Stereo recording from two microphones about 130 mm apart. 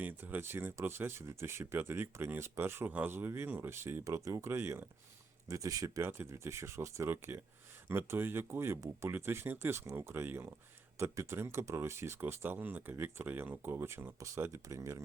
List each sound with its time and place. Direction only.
0.0 s speech: 15° right (ahead or behind)